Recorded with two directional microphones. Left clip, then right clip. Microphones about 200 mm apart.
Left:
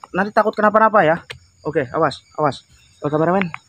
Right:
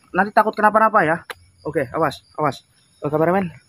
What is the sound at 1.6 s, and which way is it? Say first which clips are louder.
Speech: left 2 dB; 35° left (ahead or behind).